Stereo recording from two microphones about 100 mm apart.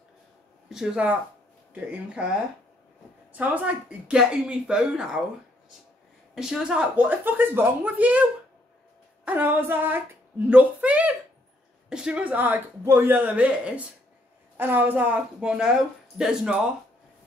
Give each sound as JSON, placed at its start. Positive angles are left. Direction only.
{"t": 0.7, "sound": "speech", "side_deg": -5}
{"t": 3.3, "sound": "speech", "side_deg": -15}
{"t": 6.3, "sound": "speech", "side_deg": -5}